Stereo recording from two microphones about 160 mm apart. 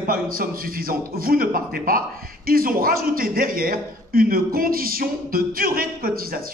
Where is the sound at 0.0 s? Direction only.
65° right (ahead or behind).